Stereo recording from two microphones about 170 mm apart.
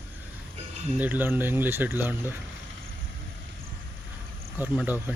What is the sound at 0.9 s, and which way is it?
Speech, 10° right (ahead or behind).